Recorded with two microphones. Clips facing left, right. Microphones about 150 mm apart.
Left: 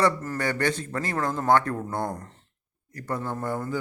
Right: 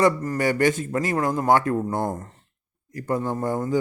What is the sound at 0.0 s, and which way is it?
Speech, 10° right (ahead or behind).